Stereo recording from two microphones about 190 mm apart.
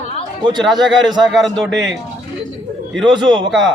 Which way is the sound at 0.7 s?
20° right (ahead or behind).